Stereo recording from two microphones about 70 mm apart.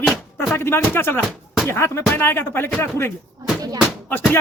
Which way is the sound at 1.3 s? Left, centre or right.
Centre.